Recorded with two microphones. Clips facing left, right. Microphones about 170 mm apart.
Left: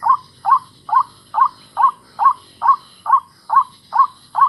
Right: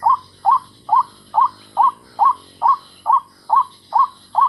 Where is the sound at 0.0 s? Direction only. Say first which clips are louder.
Right 2 dB; 25° right (ahead or behind).